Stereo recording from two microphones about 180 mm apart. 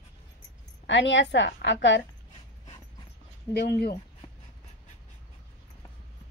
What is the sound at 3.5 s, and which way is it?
Speech, 65° left (ahead or behind).